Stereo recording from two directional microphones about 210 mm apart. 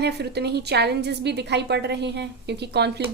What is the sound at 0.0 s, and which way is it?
A woman's voice, 50° right (ahead or behind).